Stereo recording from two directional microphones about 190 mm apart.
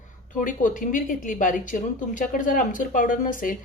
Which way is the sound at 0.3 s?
45° left (ahead or behind).